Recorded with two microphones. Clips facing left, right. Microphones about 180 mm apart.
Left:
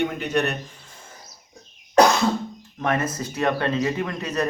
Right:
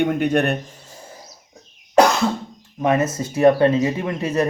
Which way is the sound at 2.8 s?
20° right (ahead or behind).